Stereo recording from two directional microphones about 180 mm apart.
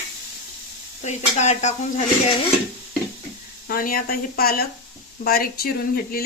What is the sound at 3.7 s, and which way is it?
Speech, 55° left (ahead or behind).